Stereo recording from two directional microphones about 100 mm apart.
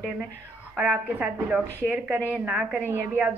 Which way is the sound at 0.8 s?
15° right (ahead or behind).